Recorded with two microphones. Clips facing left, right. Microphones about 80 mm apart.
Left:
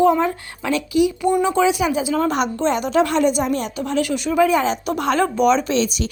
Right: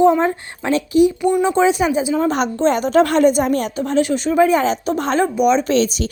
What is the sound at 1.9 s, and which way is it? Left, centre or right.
Speech, right.